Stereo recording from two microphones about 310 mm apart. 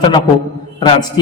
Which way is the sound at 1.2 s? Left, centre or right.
Centre.